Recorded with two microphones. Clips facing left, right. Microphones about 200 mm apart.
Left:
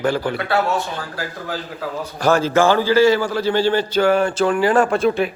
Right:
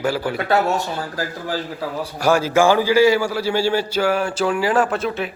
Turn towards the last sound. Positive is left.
turn(degrees=-5)  # may be behind; listen again after turning